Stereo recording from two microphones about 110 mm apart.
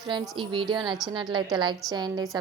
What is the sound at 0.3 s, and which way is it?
Speech, 45° right (ahead or behind).